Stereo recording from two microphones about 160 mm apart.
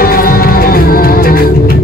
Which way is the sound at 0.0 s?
65° left (ahead or behind).